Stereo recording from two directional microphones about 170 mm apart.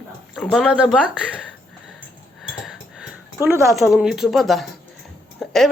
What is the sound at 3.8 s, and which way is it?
Speech, centre (ahead or behind).